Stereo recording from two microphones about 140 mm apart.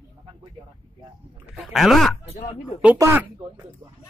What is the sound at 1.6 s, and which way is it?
Speech, centre (ahead or behind).